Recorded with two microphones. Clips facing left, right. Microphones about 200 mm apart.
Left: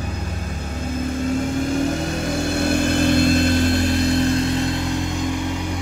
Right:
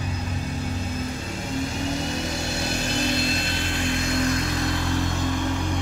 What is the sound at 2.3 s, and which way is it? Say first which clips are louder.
Vehicle: left 8 dB; 55° left (ahead or behind).